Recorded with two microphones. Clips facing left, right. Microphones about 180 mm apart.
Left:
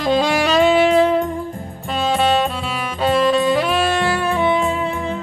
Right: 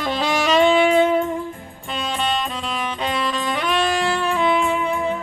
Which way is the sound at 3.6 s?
5° left (ahead or behind).